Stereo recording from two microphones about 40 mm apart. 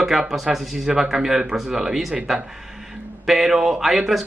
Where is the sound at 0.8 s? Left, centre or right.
Centre.